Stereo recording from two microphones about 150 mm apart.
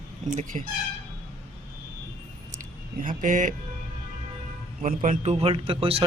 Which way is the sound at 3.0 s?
60° right (ahead or behind).